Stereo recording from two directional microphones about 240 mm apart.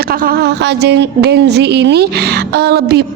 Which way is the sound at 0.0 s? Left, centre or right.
Right.